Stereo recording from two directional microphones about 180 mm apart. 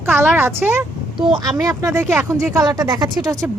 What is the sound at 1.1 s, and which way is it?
A woman's voice, 25° right (ahead or behind).